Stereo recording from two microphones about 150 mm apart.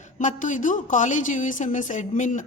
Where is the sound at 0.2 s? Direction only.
55° left (ahead or behind).